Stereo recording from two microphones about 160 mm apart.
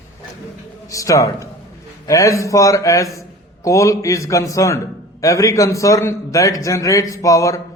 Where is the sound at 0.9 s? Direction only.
20° left (ahead or behind).